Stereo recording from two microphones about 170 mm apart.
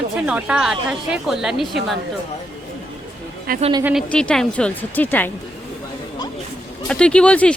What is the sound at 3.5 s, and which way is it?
Speech, 60° right (ahead or behind).